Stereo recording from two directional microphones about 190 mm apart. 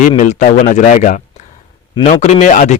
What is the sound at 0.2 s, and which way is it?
Speech, 40° left (ahead or behind).